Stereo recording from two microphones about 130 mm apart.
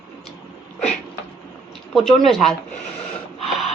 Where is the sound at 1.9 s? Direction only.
Centre (ahead or behind).